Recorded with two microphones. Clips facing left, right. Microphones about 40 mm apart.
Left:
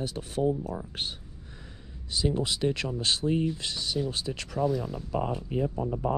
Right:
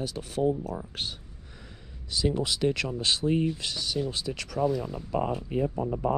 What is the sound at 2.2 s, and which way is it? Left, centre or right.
Speech, right.